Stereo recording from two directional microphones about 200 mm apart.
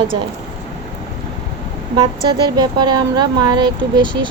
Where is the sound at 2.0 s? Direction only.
20° right (ahead or behind).